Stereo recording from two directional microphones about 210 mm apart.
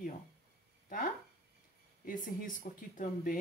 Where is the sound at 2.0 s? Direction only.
40° left (ahead or behind).